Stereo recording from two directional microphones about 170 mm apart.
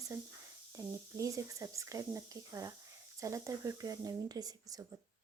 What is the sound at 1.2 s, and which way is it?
A woman's voice, 20° right (ahead or behind).